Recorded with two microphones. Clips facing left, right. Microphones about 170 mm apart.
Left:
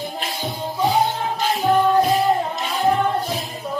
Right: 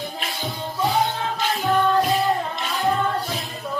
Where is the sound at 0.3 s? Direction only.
Centre (ahead or behind).